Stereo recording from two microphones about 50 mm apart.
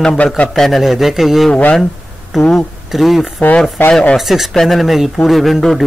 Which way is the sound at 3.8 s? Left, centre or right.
Left.